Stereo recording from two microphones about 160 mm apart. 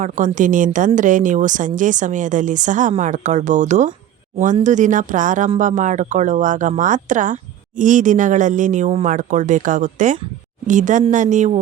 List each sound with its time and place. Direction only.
0.0 s speech: 55° right (ahead or behind)